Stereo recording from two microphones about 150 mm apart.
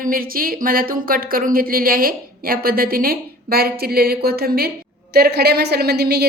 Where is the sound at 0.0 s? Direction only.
75° right (ahead or behind).